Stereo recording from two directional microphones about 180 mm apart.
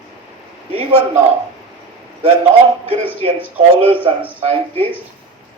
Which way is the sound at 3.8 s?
30° right (ahead or behind).